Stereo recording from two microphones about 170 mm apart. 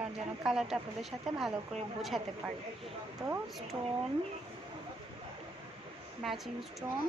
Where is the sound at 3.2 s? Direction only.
25° right (ahead or behind).